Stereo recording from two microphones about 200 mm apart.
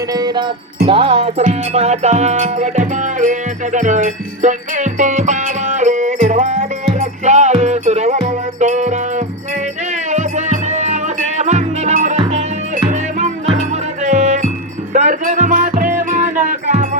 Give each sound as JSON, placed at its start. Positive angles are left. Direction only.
{"t": 0.1, "sound": "music", "side_deg": -20}